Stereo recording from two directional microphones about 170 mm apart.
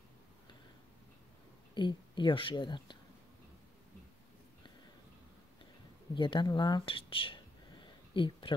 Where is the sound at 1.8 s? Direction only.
25° left (ahead or behind).